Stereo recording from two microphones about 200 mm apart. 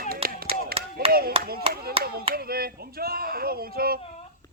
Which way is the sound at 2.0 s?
30° right (ahead or behind).